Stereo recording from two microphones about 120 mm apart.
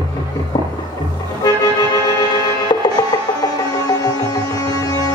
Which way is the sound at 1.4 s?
35° left (ahead or behind).